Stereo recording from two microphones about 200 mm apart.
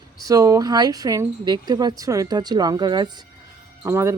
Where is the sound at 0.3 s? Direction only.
15° right (ahead or behind).